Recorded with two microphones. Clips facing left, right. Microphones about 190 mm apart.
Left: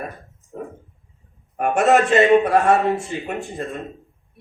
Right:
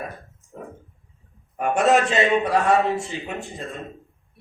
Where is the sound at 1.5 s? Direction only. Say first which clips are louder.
Left 2 dB; 55° left (ahead or behind).